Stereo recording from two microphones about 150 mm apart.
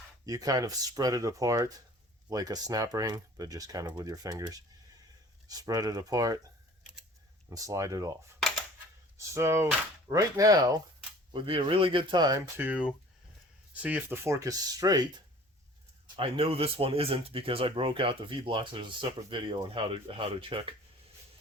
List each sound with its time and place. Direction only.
0.3 s speech: 25° right (ahead or behind)
7.5 s speech: 20° right (ahead or behind)
9.1 s speech: 15° right (ahead or behind)
11.3 s speech: 35° right (ahead or behind)
12.5 s speech: 10° right (ahead or behind); by 15.1 s 25° right (ahead or behind)
16.1 s speech: 40° right (ahead or behind)